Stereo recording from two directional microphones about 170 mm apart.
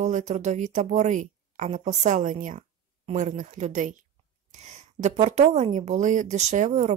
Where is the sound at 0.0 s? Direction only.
45° right (ahead or behind).